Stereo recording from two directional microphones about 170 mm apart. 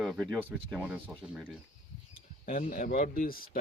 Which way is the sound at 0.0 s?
Centre (ahead or behind).